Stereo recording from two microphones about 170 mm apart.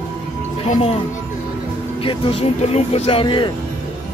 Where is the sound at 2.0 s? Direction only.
30° left (ahead or behind).